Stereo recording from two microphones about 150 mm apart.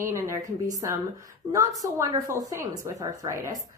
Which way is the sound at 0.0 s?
20° right (ahead or behind).